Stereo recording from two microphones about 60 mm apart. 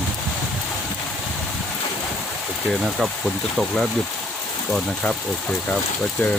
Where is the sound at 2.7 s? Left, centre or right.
Centre.